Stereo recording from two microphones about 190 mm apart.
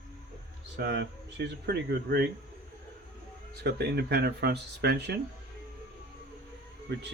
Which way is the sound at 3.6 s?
55° right (ahead or behind).